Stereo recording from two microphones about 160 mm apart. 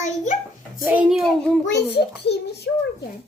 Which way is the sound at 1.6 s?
90° left.